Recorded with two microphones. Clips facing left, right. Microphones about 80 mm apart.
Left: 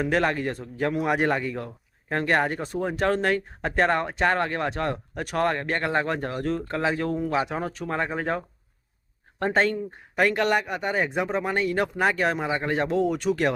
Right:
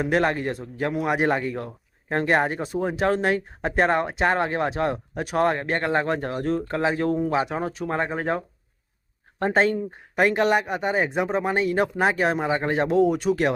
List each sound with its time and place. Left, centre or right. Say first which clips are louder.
0.0 s speech: right 1 dB; centre
6.9 s speech: right 3 dB; right
9.4 s speech: right 2 dB; centre